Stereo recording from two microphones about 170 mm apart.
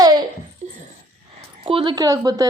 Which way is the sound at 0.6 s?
45° right (ahead or behind).